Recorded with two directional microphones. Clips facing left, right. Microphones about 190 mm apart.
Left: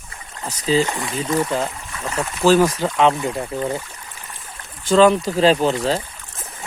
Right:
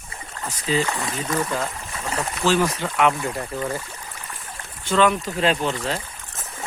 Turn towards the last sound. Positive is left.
turn(degrees=35)  # may be behind; listen again after turning